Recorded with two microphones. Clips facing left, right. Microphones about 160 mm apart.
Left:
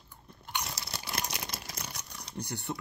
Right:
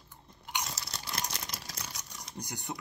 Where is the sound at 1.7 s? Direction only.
60° left (ahead or behind).